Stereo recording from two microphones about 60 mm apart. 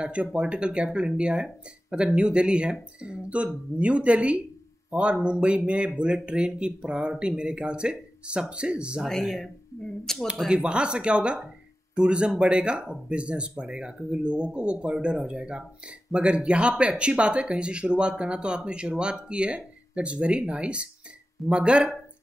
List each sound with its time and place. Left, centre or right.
0.0 s speech: centre
10.1 s speech: centre
10.5 s speech: centre